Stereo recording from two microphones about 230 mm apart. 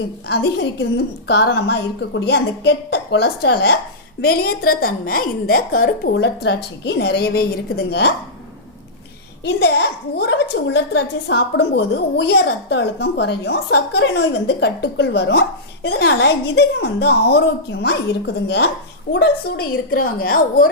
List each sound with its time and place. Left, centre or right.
0.3 s a woman's voice: left
9.4 s a woman's voice: left